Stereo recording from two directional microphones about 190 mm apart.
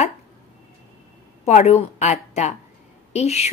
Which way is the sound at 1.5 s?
35° left (ahead or behind).